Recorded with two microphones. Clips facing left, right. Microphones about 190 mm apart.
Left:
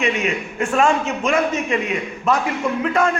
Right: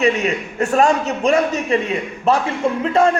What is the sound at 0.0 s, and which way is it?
A man's voice, 40° right (ahead or behind).